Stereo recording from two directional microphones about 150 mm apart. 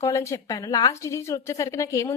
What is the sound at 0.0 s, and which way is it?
A woman's voice, 20° left (ahead or behind).